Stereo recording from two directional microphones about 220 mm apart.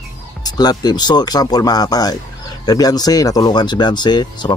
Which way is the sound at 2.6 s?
15° left (ahead or behind).